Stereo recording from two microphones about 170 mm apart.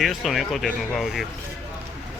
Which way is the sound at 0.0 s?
Centre (ahead or behind).